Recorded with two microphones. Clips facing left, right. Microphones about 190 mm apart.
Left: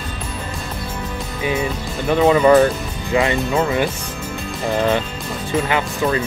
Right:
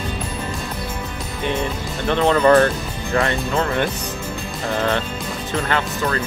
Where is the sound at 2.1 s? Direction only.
10° left (ahead or behind).